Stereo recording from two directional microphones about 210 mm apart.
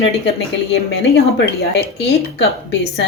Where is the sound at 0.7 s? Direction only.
55° left (ahead or behind).